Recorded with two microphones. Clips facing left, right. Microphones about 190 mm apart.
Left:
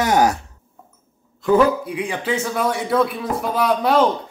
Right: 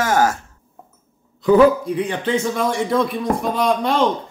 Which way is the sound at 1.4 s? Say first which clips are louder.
Right 3 dB; 10° left (ahead or behind).